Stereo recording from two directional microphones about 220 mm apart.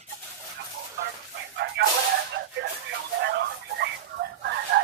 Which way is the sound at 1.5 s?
50° right (ahead or behind).